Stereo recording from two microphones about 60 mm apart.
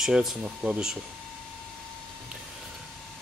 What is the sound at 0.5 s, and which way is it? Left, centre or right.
Speech, right.